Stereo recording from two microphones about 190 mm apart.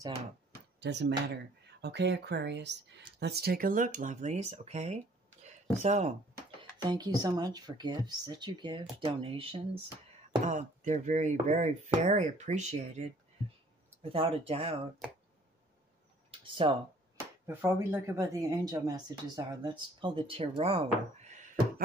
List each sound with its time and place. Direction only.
0.7 s speech: 65° right (ahead or behind); by 6.1 s 35° right (ahead or behind)
6.8 s speech: 20° right (ahead or behind); by 13.0 s 35° right (ahead or behind)
14.1 s speech: 30° right (ahead or behind)
16.3 s a sound: 25° right (ahead or behind)
17.5 s speech: 10° right (ahead or behind); by 21.8 s 40° right (ahead or behind)